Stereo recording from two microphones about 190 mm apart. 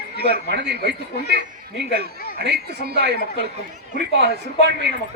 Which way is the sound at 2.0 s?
60° right (ahead or behind).